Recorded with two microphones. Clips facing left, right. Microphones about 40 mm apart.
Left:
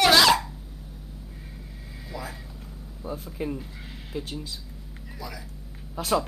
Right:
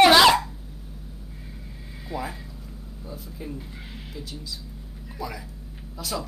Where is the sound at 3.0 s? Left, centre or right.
Left.